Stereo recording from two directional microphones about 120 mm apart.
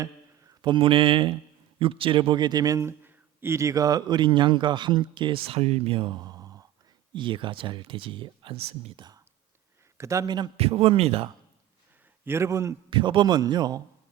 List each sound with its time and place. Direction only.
0.6 s a man's voice: 45° right (ahead or behind)
9.0 s whispering: 35° right (ahead or behind)
10.0 s a man's voice: 25° right (ahead or behind)
10.6 s speech: 55° right (ahead or behind)
12.2 s a man's voice: 20° right (ahead or behind)
12.9 s a man's voice: 40° right (ahead or behind)